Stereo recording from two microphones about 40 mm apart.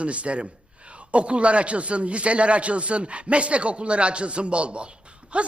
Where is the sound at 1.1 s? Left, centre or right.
Right.